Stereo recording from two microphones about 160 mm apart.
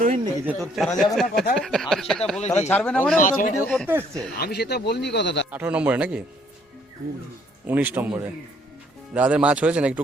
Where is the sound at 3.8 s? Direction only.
15° right (ahead or behind).